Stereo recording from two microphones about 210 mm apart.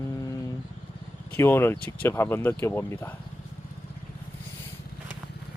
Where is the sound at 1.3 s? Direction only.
10° left (ahead or behind).